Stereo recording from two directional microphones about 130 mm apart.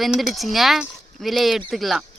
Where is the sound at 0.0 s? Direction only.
Centre (ahead or behind).